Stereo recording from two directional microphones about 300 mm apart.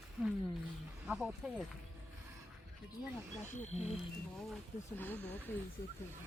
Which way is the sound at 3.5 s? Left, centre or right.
Left.